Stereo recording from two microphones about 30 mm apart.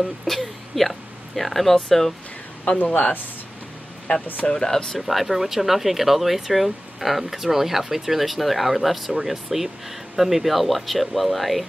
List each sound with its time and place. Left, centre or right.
0.0 s speech: centre
4.1 s speech: left
4.5 s speech: left
4.9 s speech: centre